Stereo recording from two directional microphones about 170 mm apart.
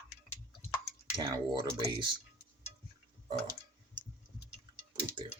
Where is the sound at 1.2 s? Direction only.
25° right (ahead or behind).